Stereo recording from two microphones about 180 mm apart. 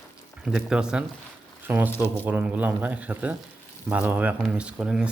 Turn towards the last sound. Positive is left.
turn(degrees=-5)  # may be behind; listen again after turning